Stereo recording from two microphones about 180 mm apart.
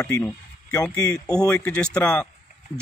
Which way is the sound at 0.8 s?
5° left (ahead or behind).